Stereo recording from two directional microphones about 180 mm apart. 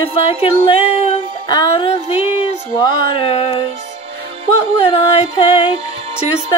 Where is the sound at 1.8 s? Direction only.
35° left (ahead or behind).